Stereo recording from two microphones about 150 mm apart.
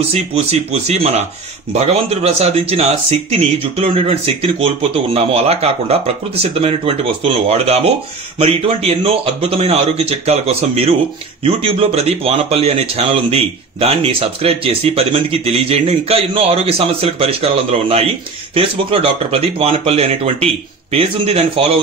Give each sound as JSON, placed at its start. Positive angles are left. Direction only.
{"t": 0.1, "sound": "speech", "side_deg": -45}